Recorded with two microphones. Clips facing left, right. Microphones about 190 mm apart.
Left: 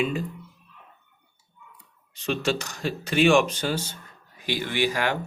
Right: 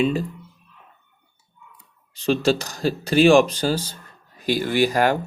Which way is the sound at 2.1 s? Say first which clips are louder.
Right 6 dB; 35° right (ahead or behind).